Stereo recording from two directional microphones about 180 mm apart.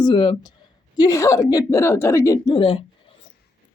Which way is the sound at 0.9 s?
20° left (ahead or behind).